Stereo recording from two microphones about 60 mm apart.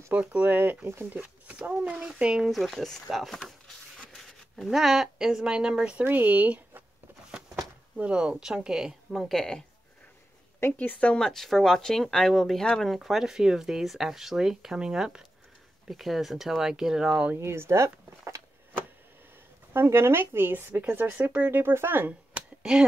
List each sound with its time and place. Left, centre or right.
0.1 s speech: right
0.8 s speech: right
1.9 s speech: centre
2.5 s speech: centre
4.2 s a sound: centre
4.6 s speech: centre
6.0 s speech: right
8.0 s speech: centre
10.8 s speech: left
11.1 s speech: centre
17.4 s speech: right
19.7 s speech: right
22.6 s speech: centre